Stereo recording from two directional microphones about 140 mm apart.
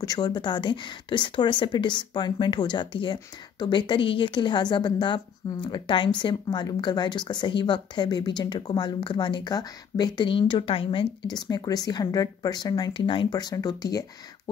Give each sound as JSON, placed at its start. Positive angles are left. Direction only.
{"t": 0.0, "sound": "speech", "side_deg": 30}